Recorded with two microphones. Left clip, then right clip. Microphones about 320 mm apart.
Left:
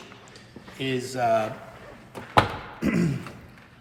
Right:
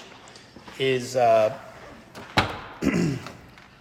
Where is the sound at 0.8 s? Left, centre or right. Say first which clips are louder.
Right 5 dB; right.